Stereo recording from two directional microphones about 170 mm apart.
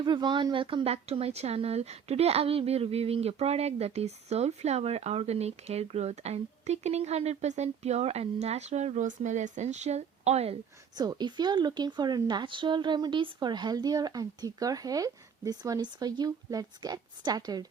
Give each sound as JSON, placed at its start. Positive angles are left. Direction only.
{"t": 0.0, "sound": "speech", "side_deg": -25}
{"t": 10.9, "sound": "a woman's voice", "side_deg": -25}